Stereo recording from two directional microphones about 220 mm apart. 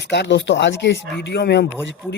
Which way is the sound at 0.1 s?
50° left (ahead or behind).